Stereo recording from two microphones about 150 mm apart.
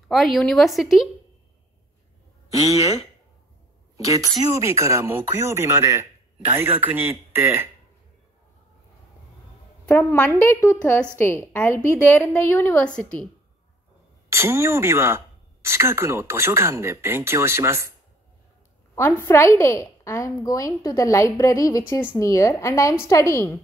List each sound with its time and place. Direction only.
0.1 s speech: centre (ahead or behind)
2.5 s speech: 25° right (ahead or behind)
3.9 s speech: 20° right (ahead or behind)
9.8 s a woman's voice: 10° left (ahead or behind)
14.3 s speech: 15° right (ahead or behind)
19.2 s a woman's voice: 15° left (ahead or behind)